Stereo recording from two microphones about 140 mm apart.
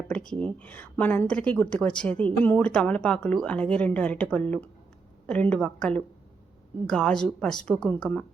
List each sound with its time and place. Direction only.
0.3 s a woman's voice: 10° left (ahead or behind)